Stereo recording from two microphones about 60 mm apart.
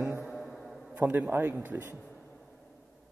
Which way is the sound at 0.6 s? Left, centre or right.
Centre.